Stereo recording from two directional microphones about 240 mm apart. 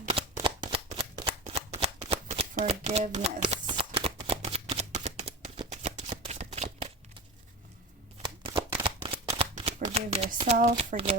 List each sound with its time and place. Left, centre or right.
0.1 s shuffling cards: right
8.4 s shuffling cards: right
10.6 s speech: right